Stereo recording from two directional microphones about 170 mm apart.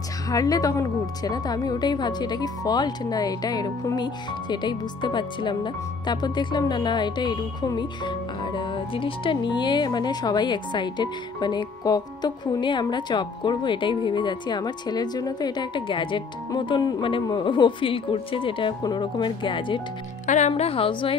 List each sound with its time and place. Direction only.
0.3 s speech: 20° left (ahead or behind)
20.2 s a woman's voice: 45° left (ahead or behind)